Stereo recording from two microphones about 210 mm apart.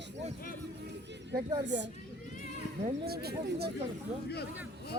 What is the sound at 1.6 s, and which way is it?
Speech, 55° right (ahead or behind).